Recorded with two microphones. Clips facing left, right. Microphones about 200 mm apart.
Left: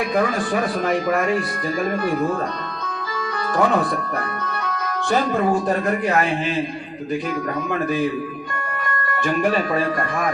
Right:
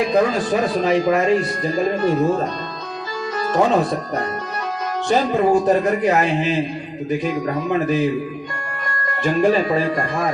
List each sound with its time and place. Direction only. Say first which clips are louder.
0.0 s speech: right 3 dB; 20° right (ahead or behind)
3.5 s speech: right 2 dB; 25° right (ahead or behind)
9.2 s speech: right 4 dB; 25° right (ahead or behind)